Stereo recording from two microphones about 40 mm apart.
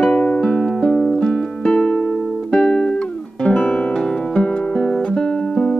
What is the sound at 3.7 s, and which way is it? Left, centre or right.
Music, left.